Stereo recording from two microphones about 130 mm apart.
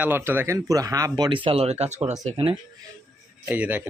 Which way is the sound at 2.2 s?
45° right (ahead or behind).